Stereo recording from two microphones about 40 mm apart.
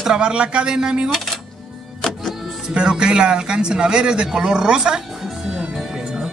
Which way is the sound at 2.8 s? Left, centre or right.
Right.